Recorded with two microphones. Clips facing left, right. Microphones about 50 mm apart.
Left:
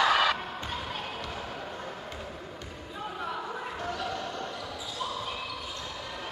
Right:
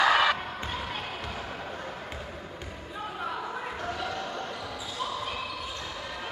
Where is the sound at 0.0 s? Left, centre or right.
Centre.